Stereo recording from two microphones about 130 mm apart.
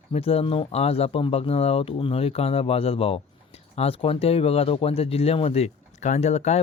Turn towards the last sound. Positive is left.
turn(degrees=55)  # may be behind; listen again after turning